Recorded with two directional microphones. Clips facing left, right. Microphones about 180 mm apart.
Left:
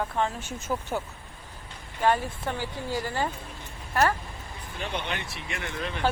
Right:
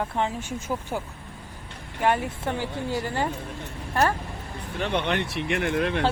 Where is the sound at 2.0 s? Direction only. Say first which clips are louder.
Right 1 dB; 20° right (ahead or behind).